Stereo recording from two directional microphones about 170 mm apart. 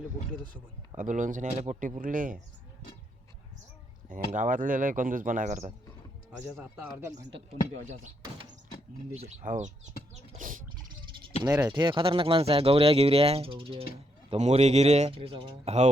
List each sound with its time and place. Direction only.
0.5 s speech: 50° right (ahead or behind)
2.0 s speech: 50° right (ahead or behind)
4.1 s speech: 50° right (ahead or behind)
6.6 s speech: 10° right (ahead or behind)
9.1 s speech: 45° right (ahead or behind)
10.2 s a sound: 45° right (ahead or behind)
11.7 s speech: 30° right (ahead or behind)